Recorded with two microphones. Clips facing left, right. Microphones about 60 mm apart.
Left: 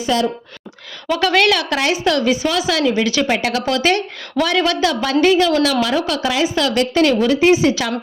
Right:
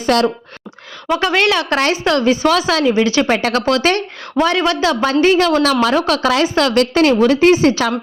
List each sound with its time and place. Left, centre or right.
0.0 s speech: right
1.0 s a woman's voice: right
1.7 s speech: right
2.8 s a woman's voice: right